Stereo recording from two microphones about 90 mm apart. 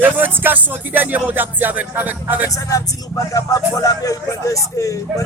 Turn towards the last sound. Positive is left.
turn(degrees=35)  # may be behind; listen again after turning